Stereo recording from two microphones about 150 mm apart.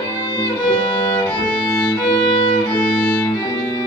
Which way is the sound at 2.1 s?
35° left (ahead or behind).